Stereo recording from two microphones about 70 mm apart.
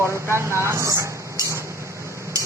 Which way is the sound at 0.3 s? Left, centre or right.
Right.